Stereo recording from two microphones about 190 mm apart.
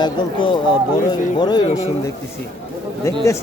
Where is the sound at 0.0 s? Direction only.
25° left (ahead or behind).